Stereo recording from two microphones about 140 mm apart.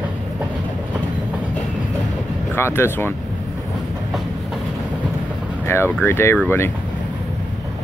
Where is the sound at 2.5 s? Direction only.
15° left (ahead or behind).